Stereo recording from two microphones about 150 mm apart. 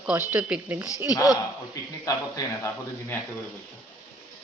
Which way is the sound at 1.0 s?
25° left (ahead or behind).